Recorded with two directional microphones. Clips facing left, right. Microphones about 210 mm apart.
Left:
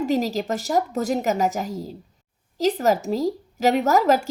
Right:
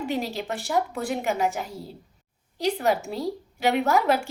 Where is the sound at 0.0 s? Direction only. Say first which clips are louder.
Left 6 dB; 40° left (ahead or behind).